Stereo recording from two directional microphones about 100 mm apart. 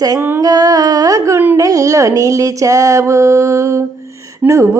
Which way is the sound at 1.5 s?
35° right (ahead or behind).